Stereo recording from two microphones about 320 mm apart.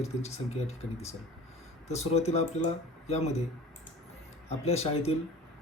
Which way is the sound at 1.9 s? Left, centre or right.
Centre.